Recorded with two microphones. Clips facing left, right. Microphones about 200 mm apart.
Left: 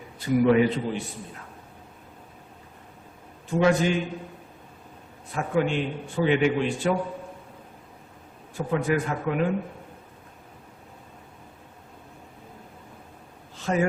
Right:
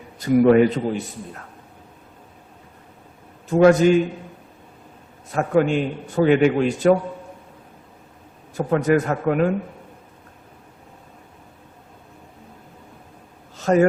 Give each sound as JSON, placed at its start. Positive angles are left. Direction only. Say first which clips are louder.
{"t": 0.2, "sound": "a man's voice", "louder": "right 6 dB", "side_deg": -45}
{"t": 3.5, "sound": "a man's voice", "louder": "right 8 dB", "side_deg": -45}
{"t": 5.3, "sound": "a man's voice", "louder": "right 6 dB", "side_deg": -45}
{"t": 8.5, "sound": "a man's voice", "louder": "right 6 dB", "side_deg": -45}
{"t": 13.6, "sound": "speech", "louder": "right 8 dB", "side_deg": -45}